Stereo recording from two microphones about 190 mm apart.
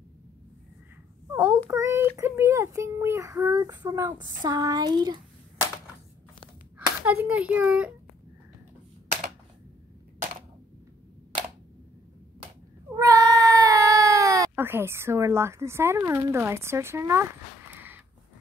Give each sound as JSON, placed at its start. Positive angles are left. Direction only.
{"t": 1.3, "sound": "a child's voice", "side_deg": -10}
{"t": 7.0, "sound": "a child's voice", "side_deg": -10}
{"t": 12.9, "sound": "cat", "side_deg": -15}